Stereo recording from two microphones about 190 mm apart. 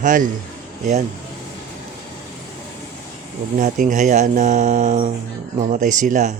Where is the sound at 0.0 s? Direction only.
45° right (ahead or behind).